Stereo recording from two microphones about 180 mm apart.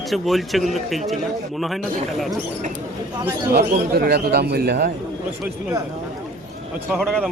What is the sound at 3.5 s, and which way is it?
Speech, 60° right (ahead or behind).